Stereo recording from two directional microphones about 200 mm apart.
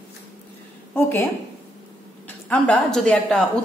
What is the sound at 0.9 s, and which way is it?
Speech, 10° left (ahead or behind).